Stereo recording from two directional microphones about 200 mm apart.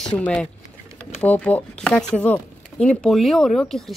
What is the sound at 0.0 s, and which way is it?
Speech, 5° left (ahead or behind).